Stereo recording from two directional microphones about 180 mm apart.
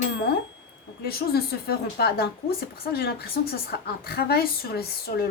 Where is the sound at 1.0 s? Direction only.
60° left (ahead or behind).